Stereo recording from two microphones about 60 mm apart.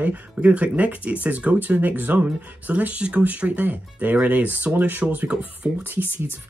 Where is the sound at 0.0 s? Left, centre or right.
Right.